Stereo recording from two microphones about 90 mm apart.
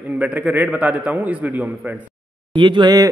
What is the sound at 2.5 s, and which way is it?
Speech, 60° right (ahead or behind).